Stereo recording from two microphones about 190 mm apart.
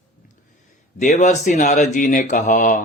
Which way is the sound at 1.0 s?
40° left (ahead or behind).